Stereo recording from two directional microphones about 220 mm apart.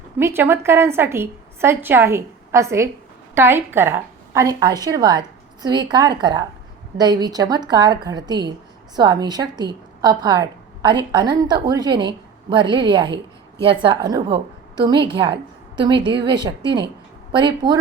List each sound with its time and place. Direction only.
0.2 s a woman's voice: 10° right (ahead or behind)